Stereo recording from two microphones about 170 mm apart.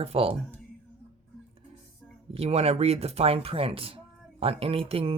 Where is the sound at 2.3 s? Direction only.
35° right (ahead or behind).